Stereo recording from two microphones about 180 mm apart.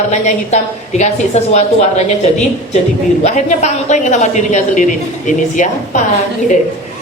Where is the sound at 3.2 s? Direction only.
40° left (ahead or behind).